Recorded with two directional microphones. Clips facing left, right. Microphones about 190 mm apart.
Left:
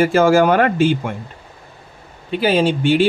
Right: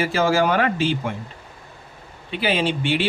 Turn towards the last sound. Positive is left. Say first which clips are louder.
# left 7 dB
turn(degrees=45)  # may be behind; listen again after turning